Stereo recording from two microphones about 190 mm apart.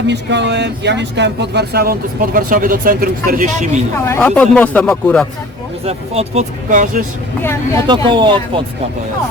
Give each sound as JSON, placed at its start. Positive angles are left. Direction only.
{"t": 0.1, "sound": "speech", "side_deg": -65}
{"t": 3.9, "sound": "speech", "side_deg": 15}
{"t": 5.8, "sound": "speech", "side_deg": -35}
{"t": 7.9, "sound": "speech", "side_deg": -25}